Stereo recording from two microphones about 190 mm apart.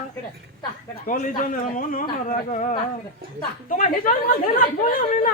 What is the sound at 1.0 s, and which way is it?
Speech, 45° left (ahead or behind).